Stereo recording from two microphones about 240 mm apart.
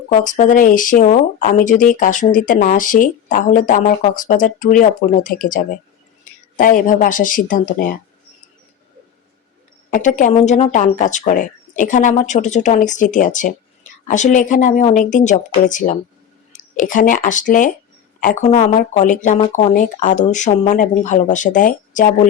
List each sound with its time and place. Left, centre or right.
0.1 s speech: left
9.9 s speech: left